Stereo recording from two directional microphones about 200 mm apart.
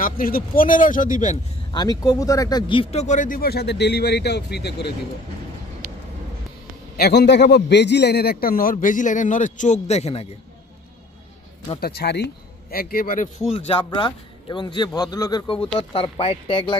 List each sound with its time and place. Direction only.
0.0 s speech: 45° left (ahead or behind)
1.7 s speech: 20° left (ahead or behind); by 4.9 s 55° left (ahead or behind)
7.0 s speech: 55° left (ahead or behind); by 10.2 s 30° left (ahead or behind)
11.8 s speech: 50° left (ahead or behind); by 16.7 s 25° left (ahead or behind)